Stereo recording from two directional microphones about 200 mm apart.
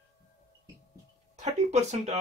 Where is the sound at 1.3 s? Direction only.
35° right (ahead or behind).